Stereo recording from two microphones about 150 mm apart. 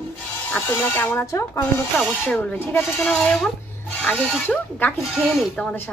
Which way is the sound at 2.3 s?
10° left (ahead or behind).